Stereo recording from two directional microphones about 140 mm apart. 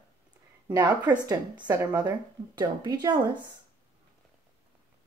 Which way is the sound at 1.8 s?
15° right (ahead or behind).